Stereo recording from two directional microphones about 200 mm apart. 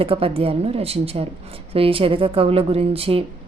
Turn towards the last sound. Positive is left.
turn(degrees=-30)  # may be behind; listen again after turning